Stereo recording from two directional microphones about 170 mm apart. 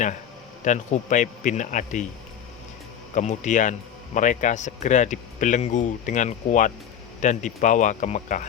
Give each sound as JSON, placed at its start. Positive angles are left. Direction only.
{"t": 0.6, "sound": "speech", "side_deg": 45}
{"t": 3.2, "sound": "speech", "side_deg": 45}